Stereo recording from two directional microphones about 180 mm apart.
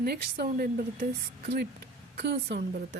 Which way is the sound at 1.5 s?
65° right (ahead or behind).